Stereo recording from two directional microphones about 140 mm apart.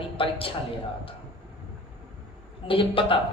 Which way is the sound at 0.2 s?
40° left (ahead or behind).